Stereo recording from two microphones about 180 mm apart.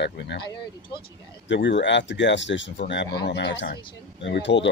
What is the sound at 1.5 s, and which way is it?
Speech, 80° left.